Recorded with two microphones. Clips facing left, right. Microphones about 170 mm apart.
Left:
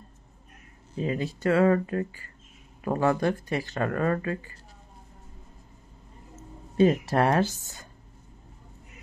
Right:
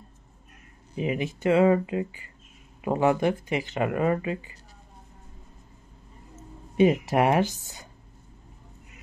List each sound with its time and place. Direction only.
0.9 s speech: 15° right (ahead or behind)
6.8 s speech: 15° right (ahead or behind)